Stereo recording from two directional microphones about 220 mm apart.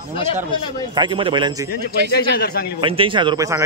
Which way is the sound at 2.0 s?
45° left (ahead or behind).